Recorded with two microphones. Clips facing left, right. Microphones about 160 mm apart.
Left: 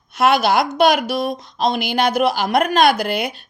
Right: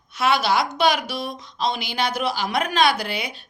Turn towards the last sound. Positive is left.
turn(degrees=45)  # may be behind; listen again after turning